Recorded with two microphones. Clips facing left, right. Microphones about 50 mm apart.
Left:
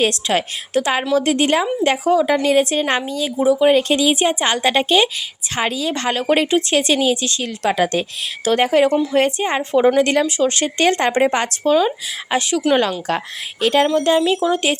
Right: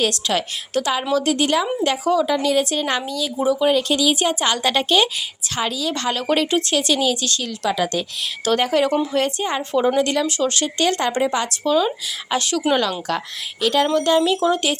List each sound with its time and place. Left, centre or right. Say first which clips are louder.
0.0 s speech: left 3 dB; left
3.3 s speech: left 4 dB; centre
3.7 s speech: left 3 dB; left
5.5 s speech: left 3 dB; left
7.6 s speech: left 4 dB; left
8.5 s speech: left 4 dB; left
10.2 s speech: left 3 dB; left
10.6 s speech: left 3 dB; left
11.9 s speech: left 2 dB; centre
12.7 s speech: left 3 dB; left
13.8 s speech: left 2 dB; left